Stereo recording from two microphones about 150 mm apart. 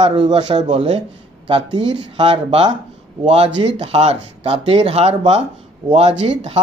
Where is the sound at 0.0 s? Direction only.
40° right (ahead or behind).